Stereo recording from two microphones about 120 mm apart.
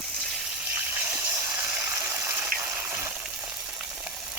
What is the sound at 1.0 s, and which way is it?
Water, 20° right (ahead or behind).